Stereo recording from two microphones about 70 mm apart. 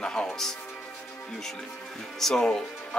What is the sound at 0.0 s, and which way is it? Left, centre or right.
Music, centre.